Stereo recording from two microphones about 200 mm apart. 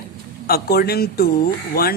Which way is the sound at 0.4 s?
50° left (ahead or behind).